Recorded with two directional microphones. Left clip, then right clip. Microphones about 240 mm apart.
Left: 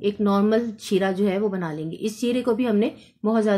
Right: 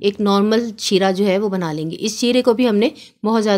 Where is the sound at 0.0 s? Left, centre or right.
Right.